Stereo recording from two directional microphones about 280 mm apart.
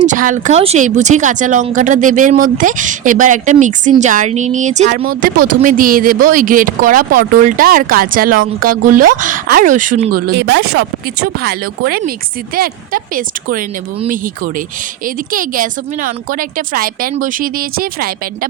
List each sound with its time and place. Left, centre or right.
0.0 s speech: right